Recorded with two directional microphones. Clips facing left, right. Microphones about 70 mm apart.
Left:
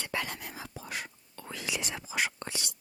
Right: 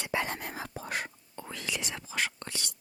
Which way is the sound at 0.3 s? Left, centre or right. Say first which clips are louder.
Right 4 dB; right.